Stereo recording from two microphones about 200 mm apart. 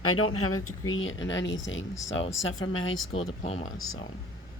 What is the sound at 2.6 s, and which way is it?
Speech, 85° left.